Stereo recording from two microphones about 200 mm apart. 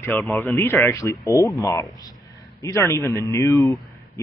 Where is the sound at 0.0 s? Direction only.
10° left (ahead or behind).